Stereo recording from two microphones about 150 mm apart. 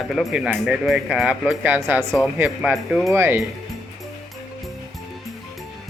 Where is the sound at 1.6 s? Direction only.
10° right (ahead or behind).